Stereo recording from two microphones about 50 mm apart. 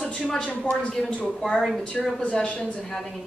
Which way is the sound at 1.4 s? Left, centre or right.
Centre.